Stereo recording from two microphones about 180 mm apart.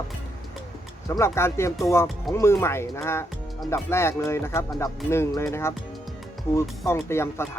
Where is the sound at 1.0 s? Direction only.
15° left (ahead or behind).